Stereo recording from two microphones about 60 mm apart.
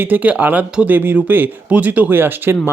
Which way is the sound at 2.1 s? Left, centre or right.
Right.